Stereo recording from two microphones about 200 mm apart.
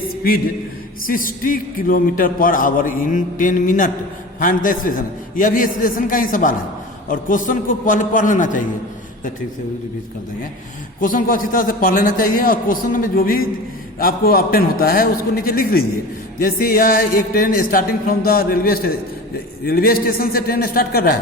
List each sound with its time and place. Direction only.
1.0 s a man's voice: 45° left (ahead or behind)
11.0 s speech: 45° left (ahead or behind)